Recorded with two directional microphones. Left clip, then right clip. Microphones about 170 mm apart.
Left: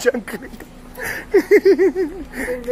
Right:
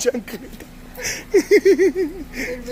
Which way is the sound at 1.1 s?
Centre (ahead or behind).